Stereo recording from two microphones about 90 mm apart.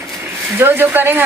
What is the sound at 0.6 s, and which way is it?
Speech, 25° right (ahead or behind).